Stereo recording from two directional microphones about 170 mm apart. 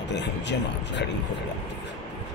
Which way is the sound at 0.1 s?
90° left.